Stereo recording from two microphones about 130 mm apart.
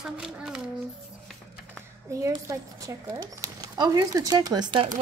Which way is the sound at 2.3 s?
25° right (ahead or behind).